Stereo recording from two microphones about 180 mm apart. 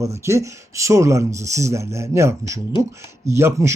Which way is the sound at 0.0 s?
15° right (ahead or behind).